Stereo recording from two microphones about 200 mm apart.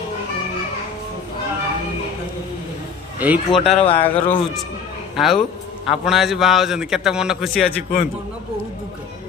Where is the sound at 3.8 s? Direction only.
25° left (ahead or behind).